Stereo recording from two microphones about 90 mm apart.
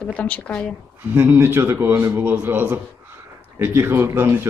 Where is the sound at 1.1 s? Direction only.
25° right (ahead or behind).